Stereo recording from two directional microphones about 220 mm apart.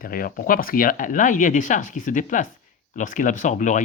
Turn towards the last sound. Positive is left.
turn(degrees=35)  # may be behind; listen again after turning